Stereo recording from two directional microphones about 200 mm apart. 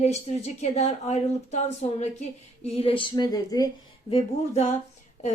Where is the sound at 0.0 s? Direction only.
35° left (ahead or behind).